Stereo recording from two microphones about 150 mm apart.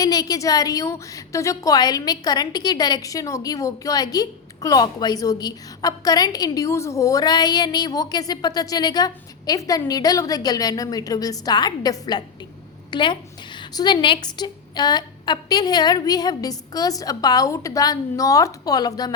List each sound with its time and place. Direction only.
0.0 s a woman's voice: 25° left (ahead or behind)